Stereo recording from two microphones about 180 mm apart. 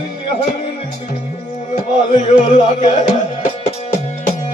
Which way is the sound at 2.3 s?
40° left (ahead or behind).